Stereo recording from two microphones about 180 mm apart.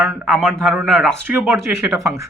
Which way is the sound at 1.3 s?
15° right (ahead or behind).